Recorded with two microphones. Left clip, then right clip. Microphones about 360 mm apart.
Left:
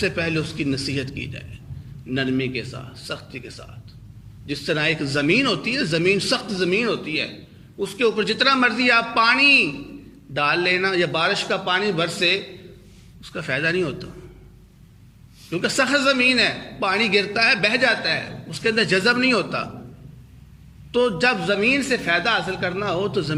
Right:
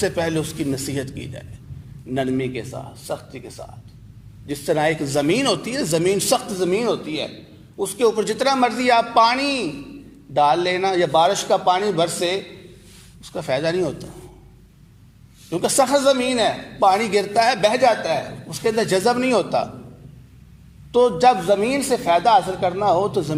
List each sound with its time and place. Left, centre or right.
0.0 s a man's voice: centre
15.4 s a man's voice: centre
20.9 s a man's voice: centre